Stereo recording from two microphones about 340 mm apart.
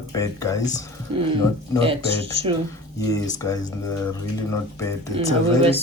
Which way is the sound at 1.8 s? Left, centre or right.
Centre.